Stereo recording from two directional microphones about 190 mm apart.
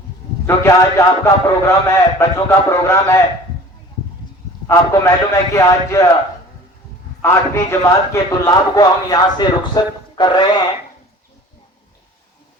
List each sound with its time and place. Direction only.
0.4 s a man's voice: 15° left (ahead or behind)
4.6 s a man's voice: 15° left (ahead or behind)
7.2 s a man's voice: 15° left (ahead or behind)